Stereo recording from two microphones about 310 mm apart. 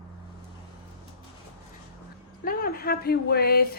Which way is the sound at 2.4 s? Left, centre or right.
Left.